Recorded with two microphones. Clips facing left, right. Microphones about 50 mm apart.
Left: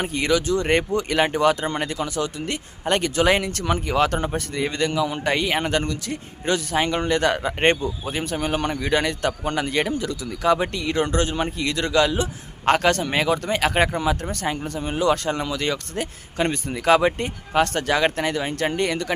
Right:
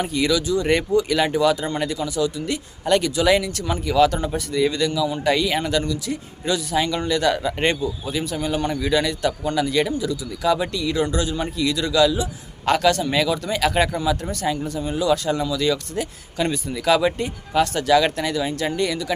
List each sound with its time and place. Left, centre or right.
0.0 s speech: left